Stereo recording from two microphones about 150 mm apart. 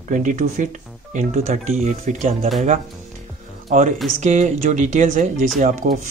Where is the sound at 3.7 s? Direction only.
55° right (ahead or behind).